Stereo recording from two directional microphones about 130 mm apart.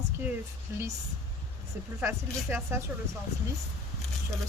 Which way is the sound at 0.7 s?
20° right (ahead or behind).